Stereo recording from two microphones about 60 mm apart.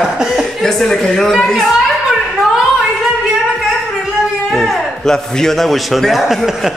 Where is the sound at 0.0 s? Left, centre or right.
Centre.